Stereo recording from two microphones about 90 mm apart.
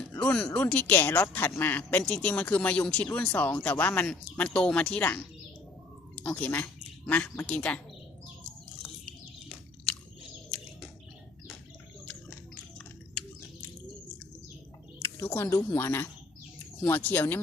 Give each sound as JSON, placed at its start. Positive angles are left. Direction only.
{"t": 0.5, "sound": "speech", "side_deg": 20}
{"t": 6.2, "sound": "speech", "side_deg": 15}
{"t": 15.0, "sound": "speech", "side_deg": 25}